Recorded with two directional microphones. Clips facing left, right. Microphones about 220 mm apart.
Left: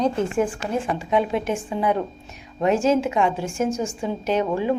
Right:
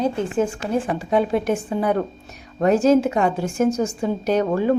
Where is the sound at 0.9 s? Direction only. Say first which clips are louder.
Right 2 dB; 40° right (ahead or behind).